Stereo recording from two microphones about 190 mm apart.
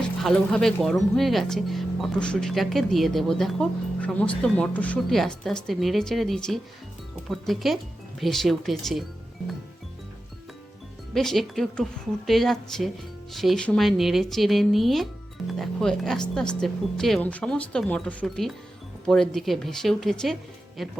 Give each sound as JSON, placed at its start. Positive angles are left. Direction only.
{"t": 0.2, "sound": "speech", "side_deg": 5}
{"t": 11.1, "sound": "speech", "side_deg": 0}